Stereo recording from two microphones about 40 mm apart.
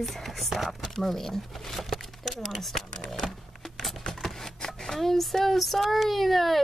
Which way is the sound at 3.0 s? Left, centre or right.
Centre.